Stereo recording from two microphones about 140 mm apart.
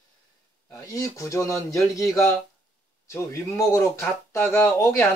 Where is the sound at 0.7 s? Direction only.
25° left (ahead or behind).